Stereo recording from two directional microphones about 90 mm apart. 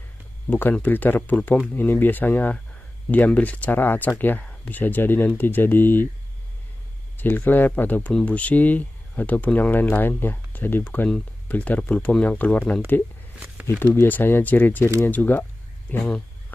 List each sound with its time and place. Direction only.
0.5 s speech: 20° left (ahead or behind)
7.2 s speech: 20° left (ahead or behind)